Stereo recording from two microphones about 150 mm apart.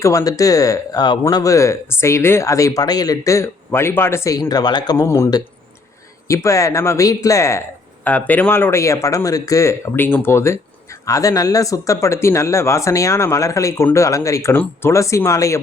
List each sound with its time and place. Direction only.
0.0 s a man's voice: 25° left (ahead or behind)